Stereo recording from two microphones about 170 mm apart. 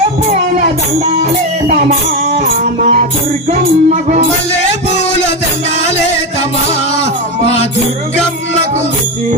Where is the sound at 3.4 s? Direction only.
45° right (ahead or behind).